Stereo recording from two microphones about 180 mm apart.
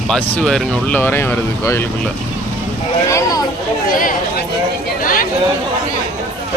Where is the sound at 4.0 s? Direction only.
50° left (ahead or behind).